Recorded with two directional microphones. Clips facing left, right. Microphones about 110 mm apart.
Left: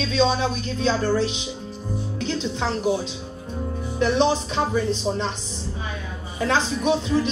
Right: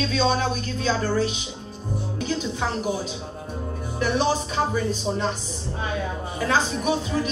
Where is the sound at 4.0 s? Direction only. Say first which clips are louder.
Left 3 dB; 5° right (ahead or behind).